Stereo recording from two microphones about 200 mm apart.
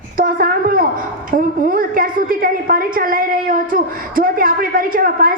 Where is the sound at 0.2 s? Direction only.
45° right (ahead or behind).